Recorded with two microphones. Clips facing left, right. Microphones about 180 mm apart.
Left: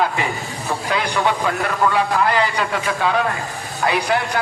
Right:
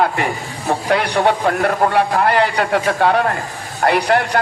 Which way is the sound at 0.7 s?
60° right (ahead or behind).